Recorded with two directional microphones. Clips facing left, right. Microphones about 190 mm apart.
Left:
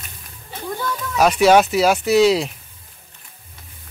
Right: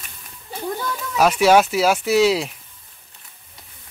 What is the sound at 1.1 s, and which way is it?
Speech, 5° right (ahead or behind).